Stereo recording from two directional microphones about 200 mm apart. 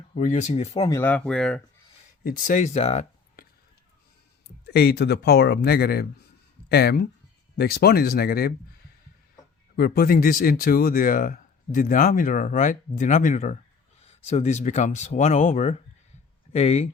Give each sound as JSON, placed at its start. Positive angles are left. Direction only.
{"t": 0.1, "sound": "speech", "side_deg": 35}
{"t": 0.7, "sound": "speech", "side_deg": 20}
{"t": 2.2, "sound": "speech", "side_deg": 45}
{"t": 4.6, "sound": "speech", "side_deg": 55}
{"t": 9.7, "sound": "speech", "side_deg": 50}